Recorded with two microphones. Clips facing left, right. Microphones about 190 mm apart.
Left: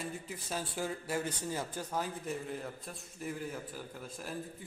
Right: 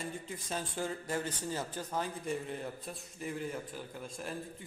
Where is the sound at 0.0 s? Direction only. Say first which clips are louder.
Even; 10° left (ahead or behind).